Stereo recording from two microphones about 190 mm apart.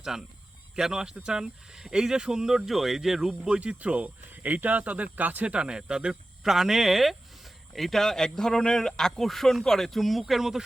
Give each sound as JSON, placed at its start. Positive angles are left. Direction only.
{"t": 0.0, "sound": "speech", "side_deg": 0}